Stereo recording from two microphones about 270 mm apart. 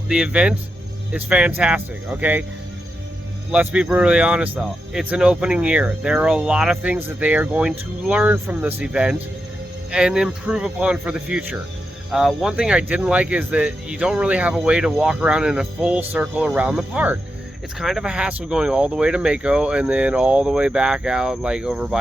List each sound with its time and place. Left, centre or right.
0.1 s speech: centre
3.5 s speech: centre